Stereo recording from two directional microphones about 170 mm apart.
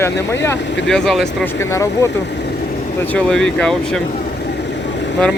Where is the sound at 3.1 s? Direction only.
5° left (ahead or behind).